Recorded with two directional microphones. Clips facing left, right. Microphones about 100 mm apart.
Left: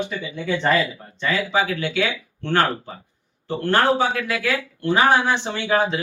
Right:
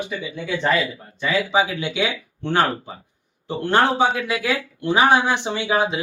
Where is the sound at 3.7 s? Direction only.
20° right (ahead or behind).